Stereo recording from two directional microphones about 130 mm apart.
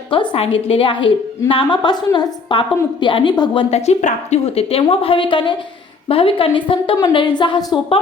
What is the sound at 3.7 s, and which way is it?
A woman's voice, 55° left (ahead or behind).